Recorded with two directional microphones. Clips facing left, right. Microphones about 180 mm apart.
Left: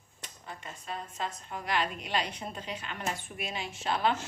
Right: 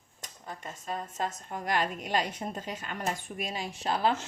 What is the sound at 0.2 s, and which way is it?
A woman's voice, 40° right (ahead or behind).